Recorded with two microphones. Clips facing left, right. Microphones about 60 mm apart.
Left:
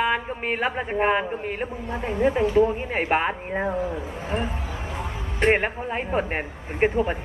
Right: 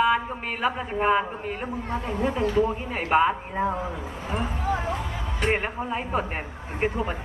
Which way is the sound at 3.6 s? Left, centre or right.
Right.